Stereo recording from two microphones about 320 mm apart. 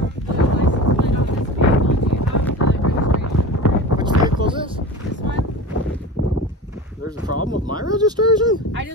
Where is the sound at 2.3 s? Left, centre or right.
Left.